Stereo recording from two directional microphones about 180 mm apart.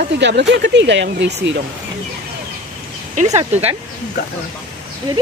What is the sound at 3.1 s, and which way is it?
Speech, 40° right (ahead or behind).